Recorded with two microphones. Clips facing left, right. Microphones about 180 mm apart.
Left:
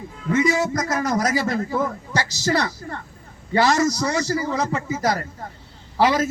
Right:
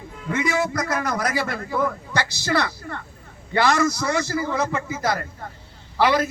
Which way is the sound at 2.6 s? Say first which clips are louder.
Even; 40° left (ahead or behind).